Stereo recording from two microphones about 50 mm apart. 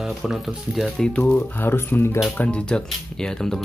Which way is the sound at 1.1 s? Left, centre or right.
Left.